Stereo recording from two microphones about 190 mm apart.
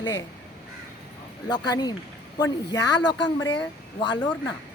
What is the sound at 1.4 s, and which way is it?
Speech, 20° left (ahead or behind).